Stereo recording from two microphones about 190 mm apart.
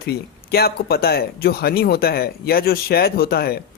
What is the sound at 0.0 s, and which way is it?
A man's voice, 55° left (ahead or behind).